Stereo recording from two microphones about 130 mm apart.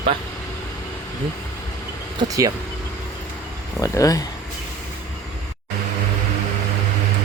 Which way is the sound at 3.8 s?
25° left (ahead or behind).